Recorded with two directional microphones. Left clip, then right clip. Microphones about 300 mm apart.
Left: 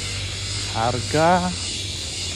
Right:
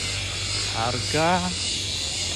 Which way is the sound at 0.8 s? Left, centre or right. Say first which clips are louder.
Left 5 dB; left.